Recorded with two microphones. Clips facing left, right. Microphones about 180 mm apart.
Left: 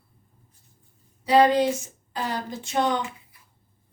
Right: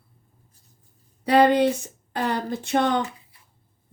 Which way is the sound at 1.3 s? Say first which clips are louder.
Right 1 dB; 60° right (ahead or behind).